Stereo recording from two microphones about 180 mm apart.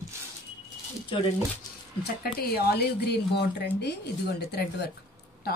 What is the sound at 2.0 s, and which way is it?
Speech, 60° left (ahead or behind).